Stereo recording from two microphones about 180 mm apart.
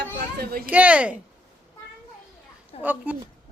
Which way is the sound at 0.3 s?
55° right (ahead or behind).